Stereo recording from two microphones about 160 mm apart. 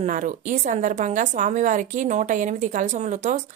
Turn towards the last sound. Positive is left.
turn(degrees=-50)  # may be behind; listen again after turning